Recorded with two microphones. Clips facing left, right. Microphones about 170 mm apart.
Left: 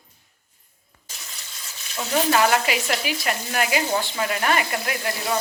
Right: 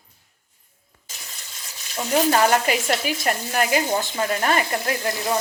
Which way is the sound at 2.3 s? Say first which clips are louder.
Left 1 dB; 35° right (ahead or behind).